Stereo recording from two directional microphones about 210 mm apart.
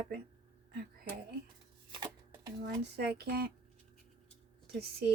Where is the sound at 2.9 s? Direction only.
50° right (ahead or behind).